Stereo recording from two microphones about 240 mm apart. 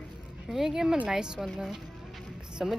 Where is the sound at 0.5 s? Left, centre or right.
Centre.